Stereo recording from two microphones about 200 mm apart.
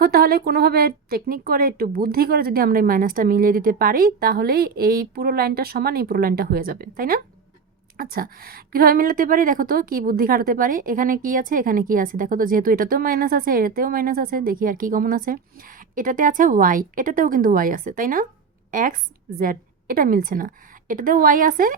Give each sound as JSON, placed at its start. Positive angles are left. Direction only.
{"t": 0.0, "sound": "a woman's voice", "side_deg": -50}